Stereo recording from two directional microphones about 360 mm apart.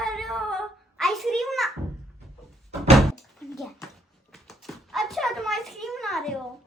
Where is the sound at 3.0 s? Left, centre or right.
Centre.